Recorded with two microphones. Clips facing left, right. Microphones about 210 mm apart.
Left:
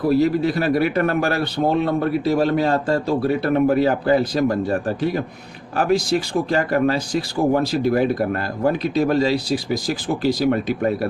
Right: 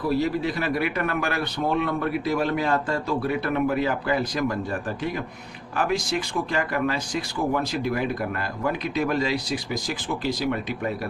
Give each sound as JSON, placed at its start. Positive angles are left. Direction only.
{"t": 0.4, "sound": "speech", "side_deg": 40}